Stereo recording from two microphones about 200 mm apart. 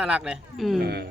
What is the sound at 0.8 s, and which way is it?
Speech, 55° right (ahead or behind).